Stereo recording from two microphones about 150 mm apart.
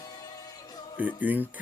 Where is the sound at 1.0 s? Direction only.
10° right (ahead or behind).